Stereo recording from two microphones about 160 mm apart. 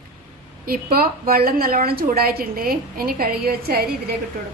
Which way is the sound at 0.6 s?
65° right (ahead or behind).